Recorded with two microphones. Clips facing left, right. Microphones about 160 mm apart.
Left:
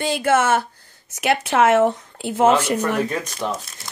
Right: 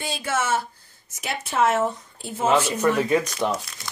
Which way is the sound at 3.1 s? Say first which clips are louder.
Right 4 dB; 10° right (ahead or behind).